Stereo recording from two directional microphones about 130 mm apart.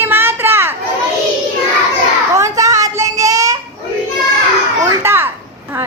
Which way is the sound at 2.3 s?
25° right (ahead or behind).